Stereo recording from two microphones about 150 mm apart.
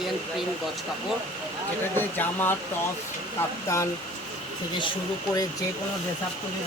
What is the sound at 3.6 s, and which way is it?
Speech, 20° left (ahead or behind).